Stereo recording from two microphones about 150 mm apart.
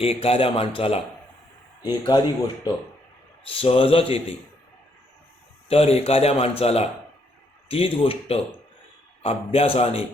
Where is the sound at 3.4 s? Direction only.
40° left (ahead or behind).